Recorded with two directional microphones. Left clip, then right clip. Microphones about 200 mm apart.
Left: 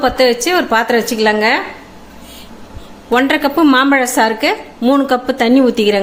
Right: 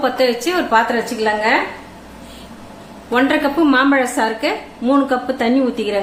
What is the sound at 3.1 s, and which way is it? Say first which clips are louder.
A woman's voice: left 3 dB; 40° left (ahead or behind).